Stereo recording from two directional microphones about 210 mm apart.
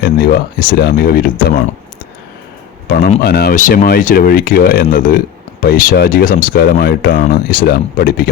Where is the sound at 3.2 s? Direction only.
45° left (ahead or behind).